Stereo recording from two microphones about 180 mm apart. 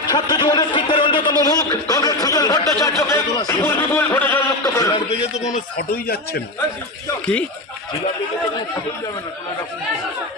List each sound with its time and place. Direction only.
0.1 s speech: 25° left (ahead or behind)
5.4 s speech: 45° left (ahead or behind)